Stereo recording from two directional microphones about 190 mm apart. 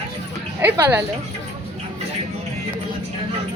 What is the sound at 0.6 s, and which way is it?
Speech, 15° right (ahead or behind).